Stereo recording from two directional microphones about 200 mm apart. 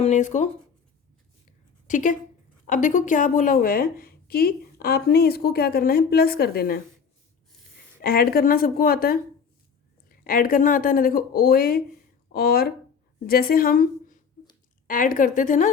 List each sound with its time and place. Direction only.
0.0 s a woman's voice: 35° left (ahead or behind)
1.9 s a woman's voice: 40° left (ahead or behind)
8.0 s a woman's voice: 50° left (ahead or behind)